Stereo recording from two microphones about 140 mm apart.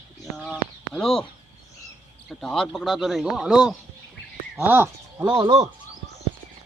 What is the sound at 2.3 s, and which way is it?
Speech, 5° left (ahead or behind).